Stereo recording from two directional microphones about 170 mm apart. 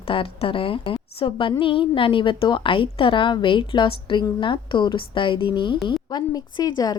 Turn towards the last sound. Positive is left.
turn(degrees=25)  # may be behind; listen again after turning